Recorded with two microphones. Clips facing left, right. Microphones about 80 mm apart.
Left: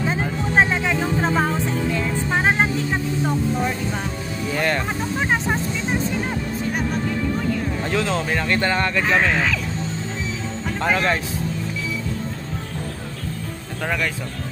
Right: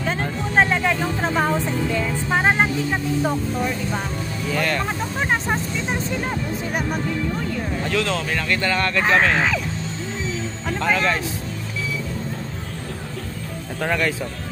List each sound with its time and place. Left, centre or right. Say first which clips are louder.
0.0 s music: left 1 dB; centre
2.2 s vehicle: right 1 dB; centre
4.6 s speech: left 1 dB; centre
5.2 s vehicle: even; centre
7.9 s speech: left 1 dB; left
9.1 s speech: right 2 dB; centre
10.8 s speech: even; centre
13.8 s speech: right 2 dB; centre